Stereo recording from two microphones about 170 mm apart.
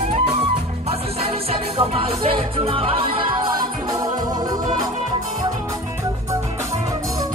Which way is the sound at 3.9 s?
20° right (ahead or behind).